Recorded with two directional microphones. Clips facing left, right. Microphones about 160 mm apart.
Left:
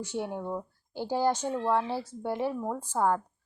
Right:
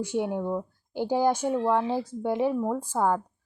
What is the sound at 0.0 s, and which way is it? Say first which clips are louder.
A woman's voice: right 6 dB; 15° right (ahead or behind).